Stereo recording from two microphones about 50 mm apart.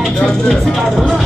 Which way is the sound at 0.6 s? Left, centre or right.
Centre.